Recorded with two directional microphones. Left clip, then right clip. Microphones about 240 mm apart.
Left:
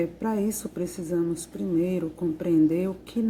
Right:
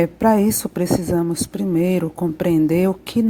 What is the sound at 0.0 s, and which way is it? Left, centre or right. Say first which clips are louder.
Speech: right 11 dB; right.